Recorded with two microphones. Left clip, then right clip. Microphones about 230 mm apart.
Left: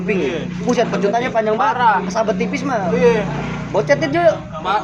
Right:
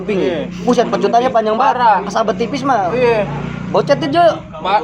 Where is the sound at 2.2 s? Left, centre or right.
Centre.